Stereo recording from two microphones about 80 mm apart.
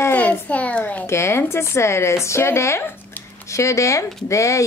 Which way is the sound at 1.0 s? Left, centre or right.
Left.